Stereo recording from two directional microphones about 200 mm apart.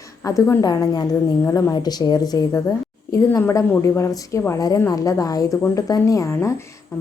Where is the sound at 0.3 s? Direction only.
15° left (ahead or behind).